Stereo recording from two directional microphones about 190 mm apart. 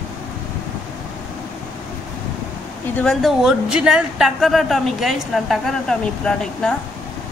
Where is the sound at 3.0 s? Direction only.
Centre (ahead or behind).